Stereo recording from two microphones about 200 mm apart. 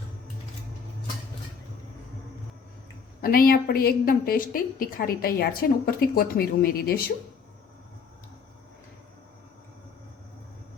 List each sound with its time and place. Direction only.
3.2 s a woman's voice: 45° left (ahead or behind)